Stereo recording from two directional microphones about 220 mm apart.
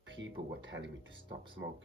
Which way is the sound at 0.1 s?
60° right (ahead or behind).